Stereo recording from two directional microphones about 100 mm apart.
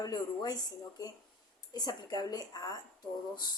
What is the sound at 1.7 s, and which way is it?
A woman's voice, 40° left (ahead or behind).